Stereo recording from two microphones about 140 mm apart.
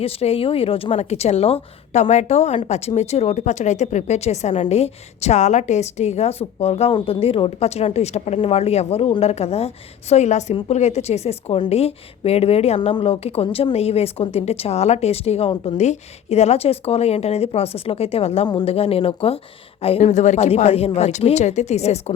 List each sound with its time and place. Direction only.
0.0 s speech: 45° left (ahead or behind)